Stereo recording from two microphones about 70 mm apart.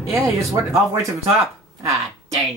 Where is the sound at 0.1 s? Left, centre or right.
Right.